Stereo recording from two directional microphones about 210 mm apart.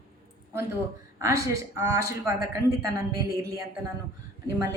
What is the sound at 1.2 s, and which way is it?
A woman's voice, 15° right (ahead or behind).